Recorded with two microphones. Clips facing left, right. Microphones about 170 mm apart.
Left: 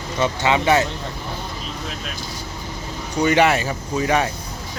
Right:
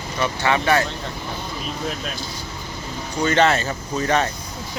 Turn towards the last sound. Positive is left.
turn(degrees=10)  # may be behind; listen again after turning